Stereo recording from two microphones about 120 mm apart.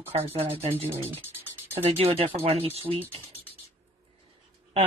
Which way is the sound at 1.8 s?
55° right (ahead or behind).